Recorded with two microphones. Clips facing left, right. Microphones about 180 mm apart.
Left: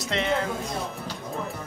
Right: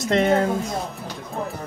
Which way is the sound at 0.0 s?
45° right (ahead or behind).